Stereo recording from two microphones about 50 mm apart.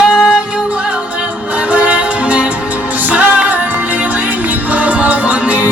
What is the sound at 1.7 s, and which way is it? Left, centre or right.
Music, right.